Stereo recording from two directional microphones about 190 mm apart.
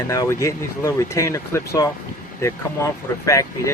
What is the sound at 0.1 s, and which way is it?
Speech, 15° left (ahead or behind).